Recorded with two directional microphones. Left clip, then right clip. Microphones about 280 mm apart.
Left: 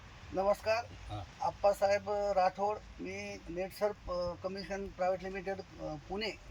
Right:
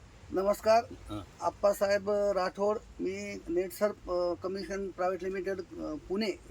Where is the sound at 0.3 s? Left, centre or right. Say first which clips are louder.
Right 5 dB; centre.